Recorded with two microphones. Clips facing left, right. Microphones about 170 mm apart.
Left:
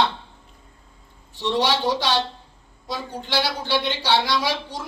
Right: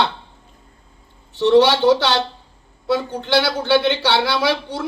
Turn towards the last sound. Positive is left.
turn(degrees=-70)  # may be behind; listen again after turning